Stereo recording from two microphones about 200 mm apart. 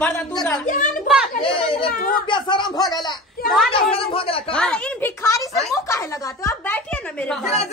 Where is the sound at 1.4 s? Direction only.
25° left (ahead or behind).